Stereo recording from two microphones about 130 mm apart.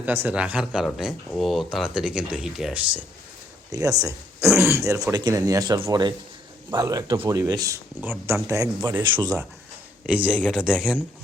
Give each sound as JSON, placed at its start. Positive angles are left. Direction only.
{"t": 0.0, "sound": "speech", "side_deg": -15}
{"t": 3.7, "sound": "speech", "side_deg": -25}
{"t": 10.1, "sound": "speech", "side_deg": -10}
{"t": 10.3, "sound": "speech", "side_deg": 5}
{"t": 10.6, "sound": "speech", "side_deg": -10}